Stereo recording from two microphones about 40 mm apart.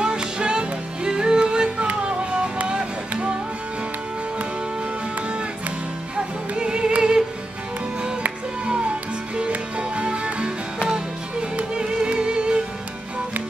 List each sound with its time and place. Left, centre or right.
0.0 s music: right
6.1 s music: right
8.6 s music: right
11.7 s music: right